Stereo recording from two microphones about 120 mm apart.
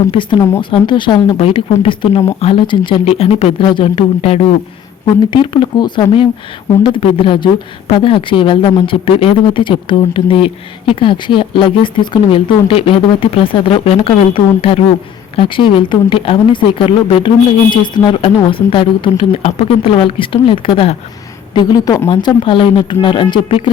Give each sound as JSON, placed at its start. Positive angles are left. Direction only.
{"t": 0.1, "sound": "speech", "side_deg": 45}
{"t": 1.4, "sound": "speech", "side_deg": 55}
{"t": 5.0, "sound": "speech", "side_deg": 45}
{"t": 19.4, "sound": "speech", "side_deg": 60}
{"t": 21.5, "sound": "speech", "side_deg": 30}